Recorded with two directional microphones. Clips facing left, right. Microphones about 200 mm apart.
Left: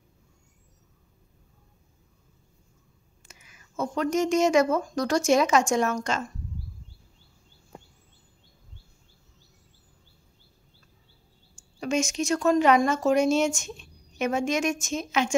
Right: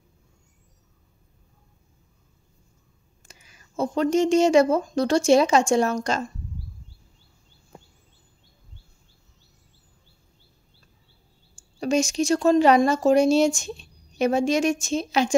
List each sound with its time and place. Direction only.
3.2 s speech: 30° right (ahead or behind)
11.8 s speech: 35° right (ahead or behind)